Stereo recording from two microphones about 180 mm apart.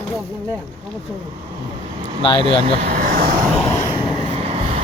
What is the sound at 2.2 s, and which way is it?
Speech, 30° left (ahead or behind).